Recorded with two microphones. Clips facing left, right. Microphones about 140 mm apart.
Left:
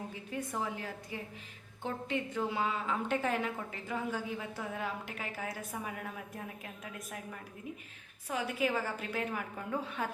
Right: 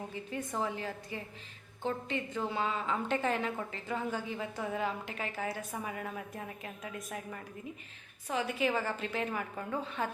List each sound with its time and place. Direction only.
0.1 s a woman's voice: 5° left (ahead or behind)